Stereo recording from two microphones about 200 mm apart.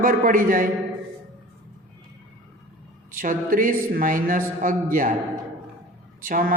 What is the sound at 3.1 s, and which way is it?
A man's voice, 45° right (ahead or behind).